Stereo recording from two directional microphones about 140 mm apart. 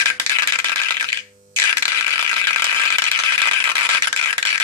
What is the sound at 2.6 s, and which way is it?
Ratchet, 35° right (ahead or behind).